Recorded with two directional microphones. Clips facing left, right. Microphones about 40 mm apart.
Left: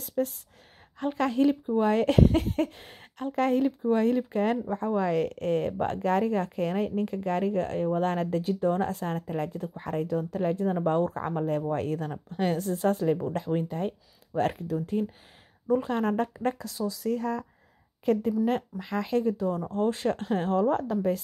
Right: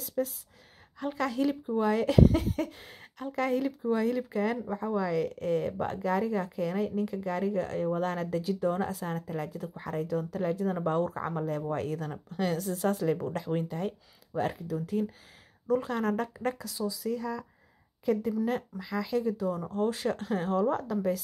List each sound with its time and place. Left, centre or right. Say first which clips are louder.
0.2 s speech: left 3 dB; centre
0.9 s speech: left 4 dB; left
14.8 s speech: left 2 dB; left
17.1 s speech: left 4 dB; left